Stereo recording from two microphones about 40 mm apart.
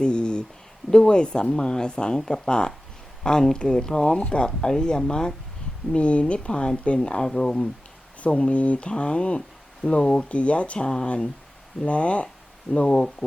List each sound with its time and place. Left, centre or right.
0.0 s a sound: left
0.9 s a woman's voice: centre
5.9 s a woman's voice: left
7.3 s speech: centre
8.2 s a woman's voice: left
10.2 s a woman's voice: left